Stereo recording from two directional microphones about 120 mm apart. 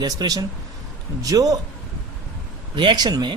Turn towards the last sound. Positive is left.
turn(degrees=-35)  # may be behind; listen again after turning